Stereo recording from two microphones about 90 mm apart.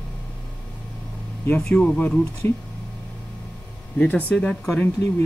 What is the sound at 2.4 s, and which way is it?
Speech, 25° left (ahead or behind).